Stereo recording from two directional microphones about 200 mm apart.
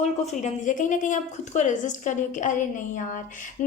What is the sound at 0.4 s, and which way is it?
A woman's voice, 40° left (ahead or behind).